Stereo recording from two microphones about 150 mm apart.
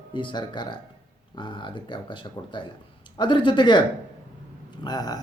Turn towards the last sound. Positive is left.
turn(degrees=25)  # may be behind; listen again after turning